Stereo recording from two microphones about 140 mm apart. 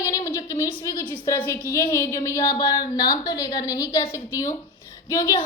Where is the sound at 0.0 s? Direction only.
25° left (ahead or behind).